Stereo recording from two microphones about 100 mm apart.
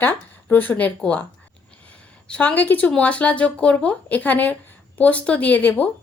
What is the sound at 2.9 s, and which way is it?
Speech, 10° left (ahead or behind).